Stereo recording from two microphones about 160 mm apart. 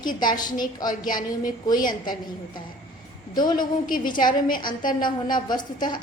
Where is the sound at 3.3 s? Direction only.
25° left (ahead or behind).